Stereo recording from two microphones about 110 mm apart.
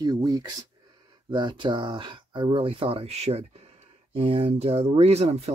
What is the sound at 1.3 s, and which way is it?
Speech, 45° right (ahead or behind).